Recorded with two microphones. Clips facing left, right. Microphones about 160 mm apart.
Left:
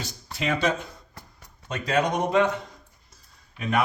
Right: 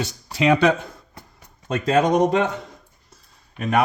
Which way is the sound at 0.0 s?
80° right.